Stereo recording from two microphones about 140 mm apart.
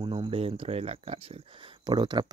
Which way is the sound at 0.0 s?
40° right (ahead or behind).